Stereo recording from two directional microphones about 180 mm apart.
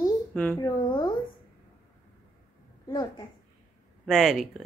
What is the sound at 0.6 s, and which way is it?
Speech, 20° left (ahead or behind).